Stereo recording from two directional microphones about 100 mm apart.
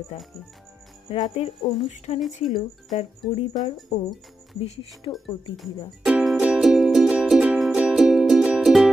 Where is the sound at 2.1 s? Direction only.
90° left.